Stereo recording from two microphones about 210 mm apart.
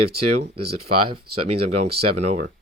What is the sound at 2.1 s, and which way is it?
Speech, 30° right (ahead or behind).